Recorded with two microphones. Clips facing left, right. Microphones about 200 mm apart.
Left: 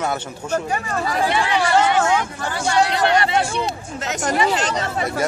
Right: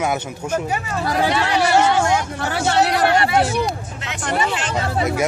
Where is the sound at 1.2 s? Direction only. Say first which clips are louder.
Right 2 dB; 70° right (ahead or behind).